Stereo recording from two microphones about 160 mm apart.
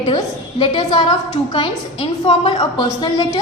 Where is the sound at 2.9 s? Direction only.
25° left (ahead or behind).